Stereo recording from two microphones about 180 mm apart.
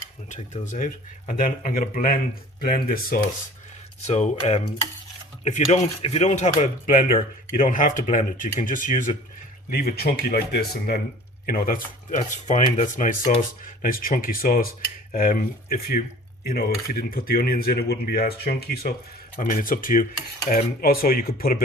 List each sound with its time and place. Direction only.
0.3 s speech: 40° left (ahead or behind)
4.0 s speech: 40° left (ahead or behind); by 21.6 s 55° left (ahead or behind)